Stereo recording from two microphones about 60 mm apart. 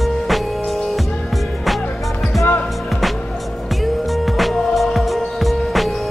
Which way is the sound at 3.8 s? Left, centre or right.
Centre.